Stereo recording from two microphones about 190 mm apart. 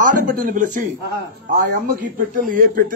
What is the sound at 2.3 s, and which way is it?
Speech, 45° right (ahead or behind).